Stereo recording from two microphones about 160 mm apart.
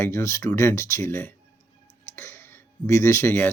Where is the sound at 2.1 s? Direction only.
15° left (ahead or behind).